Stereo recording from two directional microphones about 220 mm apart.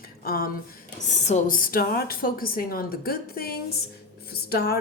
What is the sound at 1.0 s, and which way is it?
Speech, 30° left (ahead or behind).